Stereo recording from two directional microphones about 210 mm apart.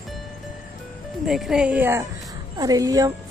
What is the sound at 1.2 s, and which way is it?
A woman's voice, centre (ahead or behind).